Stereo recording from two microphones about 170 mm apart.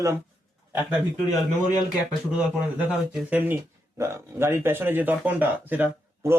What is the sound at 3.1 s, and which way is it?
Speech, 5° right (ahead or behind).